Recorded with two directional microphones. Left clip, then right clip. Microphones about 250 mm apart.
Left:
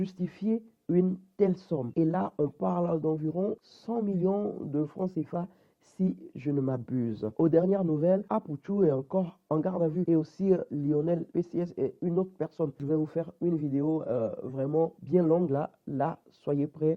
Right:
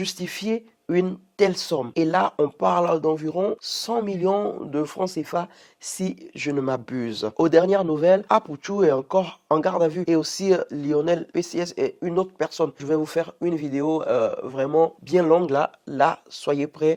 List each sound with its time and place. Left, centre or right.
0.0 s speech: centre